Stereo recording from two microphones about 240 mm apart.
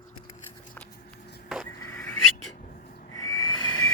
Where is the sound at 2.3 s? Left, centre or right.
Left.